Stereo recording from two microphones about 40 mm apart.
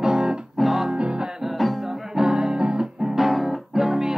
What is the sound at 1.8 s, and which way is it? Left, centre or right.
Music, centre.